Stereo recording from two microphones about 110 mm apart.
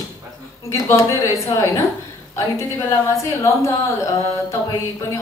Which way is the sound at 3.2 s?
25° left (ahead or behind).